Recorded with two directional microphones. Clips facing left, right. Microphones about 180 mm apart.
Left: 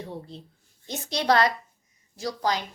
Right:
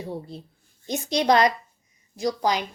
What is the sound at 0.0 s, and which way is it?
A woman's voice, 10° right (ahead or behind).